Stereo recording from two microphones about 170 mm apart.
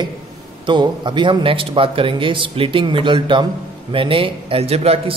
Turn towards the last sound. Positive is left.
turn(degrees=-35)  # may be behind; listen again after turning